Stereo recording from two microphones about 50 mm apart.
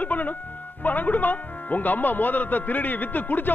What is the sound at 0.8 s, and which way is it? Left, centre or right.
Speech, left.